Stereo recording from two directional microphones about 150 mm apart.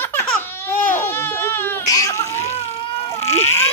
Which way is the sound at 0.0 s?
15° left (ahead or behind).